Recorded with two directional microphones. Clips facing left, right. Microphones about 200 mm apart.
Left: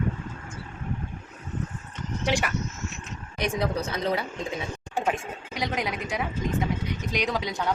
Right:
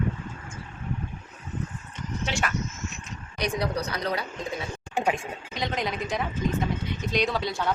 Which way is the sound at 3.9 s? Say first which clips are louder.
Left 2 dB; 25° left (ahead or behind).